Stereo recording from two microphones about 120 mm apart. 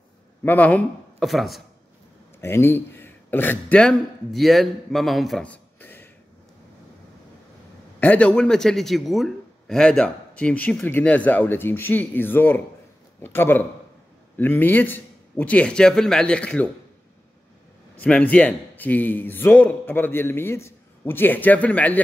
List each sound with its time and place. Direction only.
0.4 s a man's voice: 15° left (ahead or behind)
1.2 s speech: centre (ahead or behind)
2.4 s a man's voice: 20° left (ahead or behind); by 5.5 s centre (ahead or behind)
5.5 s a sound: 15° left (ahead or behind)
8.0 s a man's voice: 10° left (ahead or behind)
17.9 s a man's voice: 10° left (ahead or behind)